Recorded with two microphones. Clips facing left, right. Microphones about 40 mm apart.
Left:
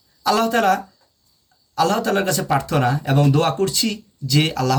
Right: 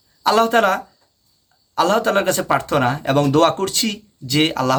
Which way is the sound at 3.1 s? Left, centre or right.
Right.